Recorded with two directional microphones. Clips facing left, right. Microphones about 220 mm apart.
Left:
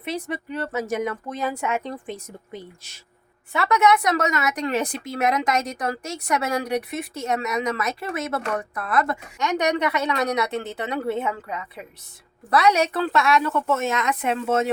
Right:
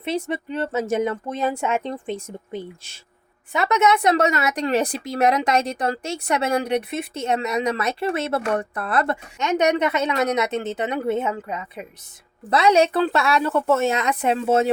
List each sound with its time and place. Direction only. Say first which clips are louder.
0.0 s a woman's voice: right 4 dB; 25° right (ahead or behind)